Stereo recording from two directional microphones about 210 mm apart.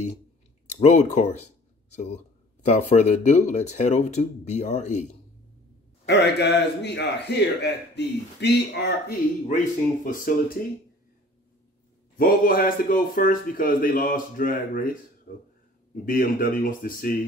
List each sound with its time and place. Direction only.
0.7 s speech: 35° left (ahead or behind)
2.6 s speech: 35° left (ahead or behind)
6.0 s a man's voice: 55° left (ahead or behind)
12.2 s a man's voice: 45° left (ahead or behind)